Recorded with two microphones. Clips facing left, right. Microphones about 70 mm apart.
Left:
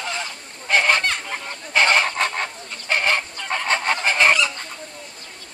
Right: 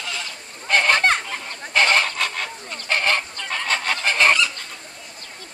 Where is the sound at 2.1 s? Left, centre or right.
Left; by 4.5 s centre.